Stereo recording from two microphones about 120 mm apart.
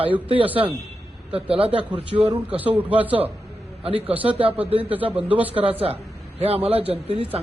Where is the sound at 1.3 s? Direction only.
50° right (ahead or behind).